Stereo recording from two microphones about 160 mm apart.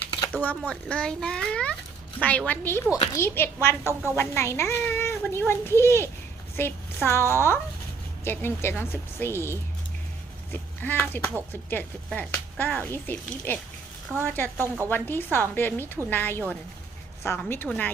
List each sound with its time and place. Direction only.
0.3 s a child's voice: 10° left (ahead or behind)
2.9 s a child's voice: 20° left (ahead or behind)